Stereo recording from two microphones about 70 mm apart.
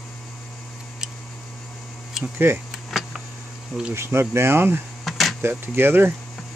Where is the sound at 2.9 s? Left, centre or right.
Centre.